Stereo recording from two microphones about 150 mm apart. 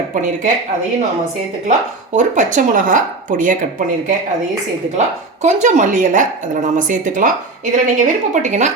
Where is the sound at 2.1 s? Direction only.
55° right (ahead or behind).